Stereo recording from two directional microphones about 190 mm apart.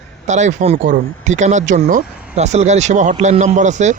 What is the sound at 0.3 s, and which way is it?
Speech, 40° right (ahead or behind).